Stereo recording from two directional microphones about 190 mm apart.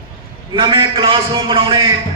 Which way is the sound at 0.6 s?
25° right (ahead or behind).